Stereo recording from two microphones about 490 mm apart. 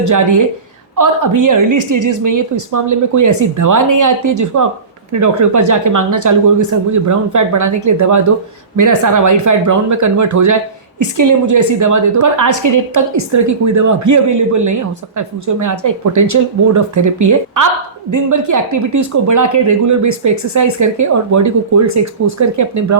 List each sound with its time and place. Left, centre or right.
0.0 s speech: right